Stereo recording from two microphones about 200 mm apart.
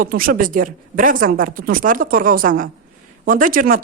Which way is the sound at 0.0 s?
45° right (ahead or behind).